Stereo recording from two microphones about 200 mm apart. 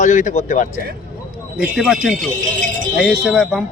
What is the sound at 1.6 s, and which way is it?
Speech, 5° right (ahead or behind).